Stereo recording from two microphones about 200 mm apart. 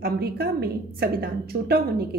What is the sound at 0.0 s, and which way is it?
A woman's voice, 50° right (ahead or behind).